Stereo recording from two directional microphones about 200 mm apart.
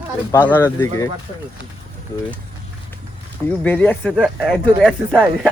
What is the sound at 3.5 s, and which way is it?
Speech, 10° left (ahead or behind).